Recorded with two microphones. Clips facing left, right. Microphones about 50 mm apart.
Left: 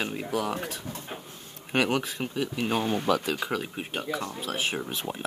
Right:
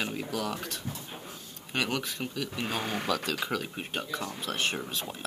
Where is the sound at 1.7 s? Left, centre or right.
Centre.